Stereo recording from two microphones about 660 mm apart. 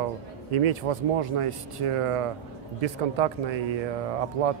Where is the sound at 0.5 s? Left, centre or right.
Right.